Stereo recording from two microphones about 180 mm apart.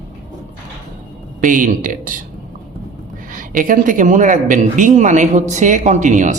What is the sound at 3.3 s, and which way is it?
Speech, 50° right (ahead or behind).